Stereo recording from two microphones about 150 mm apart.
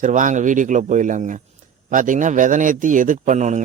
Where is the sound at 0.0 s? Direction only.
60° right (ahead or behind).